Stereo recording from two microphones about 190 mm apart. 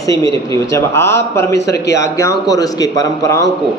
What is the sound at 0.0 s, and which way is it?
Speech, 20° left (ahead or behind).